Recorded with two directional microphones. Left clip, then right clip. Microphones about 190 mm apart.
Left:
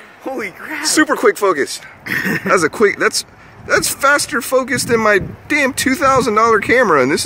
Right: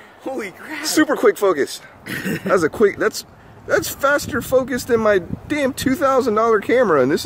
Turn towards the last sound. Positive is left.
turn(degrees=0)  # may be behind; listen again after turning